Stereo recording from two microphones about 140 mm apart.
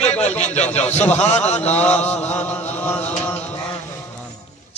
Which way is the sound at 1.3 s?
10° left (ahead or behind).